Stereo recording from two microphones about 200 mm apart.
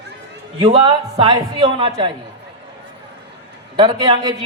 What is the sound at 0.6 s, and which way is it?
A man's voice, 25° right (ahead or behind).